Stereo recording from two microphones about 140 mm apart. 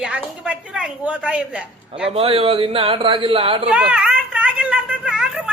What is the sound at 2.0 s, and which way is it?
A man's voice, 45° right (ahead or behind).